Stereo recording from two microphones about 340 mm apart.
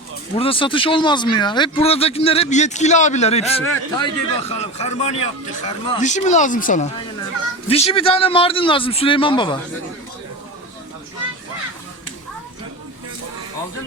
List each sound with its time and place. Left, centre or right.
0.3 s speech: centre